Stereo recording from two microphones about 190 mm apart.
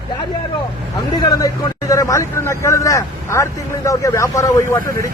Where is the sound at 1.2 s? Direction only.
20° left (ahead or behind).